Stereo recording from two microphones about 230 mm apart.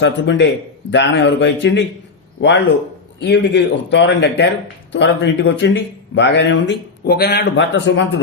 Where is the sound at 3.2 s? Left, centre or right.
Left.